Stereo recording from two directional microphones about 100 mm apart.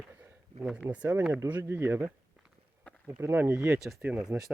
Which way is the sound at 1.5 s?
25° right (ahead or behind).